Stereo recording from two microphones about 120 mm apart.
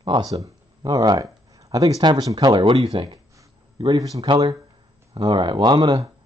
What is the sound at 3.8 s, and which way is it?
Speech, 30° right (ahead or behind).